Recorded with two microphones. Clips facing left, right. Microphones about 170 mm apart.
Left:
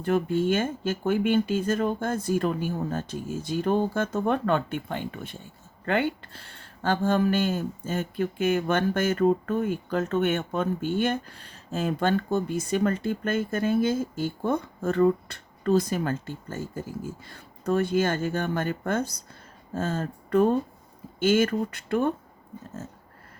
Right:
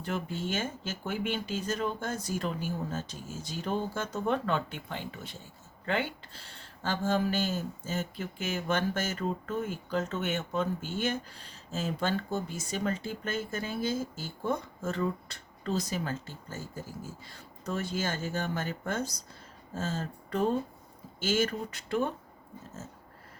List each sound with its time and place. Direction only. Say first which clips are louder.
0.0 s speech: left 10 dB; 55° left (ahead or behind)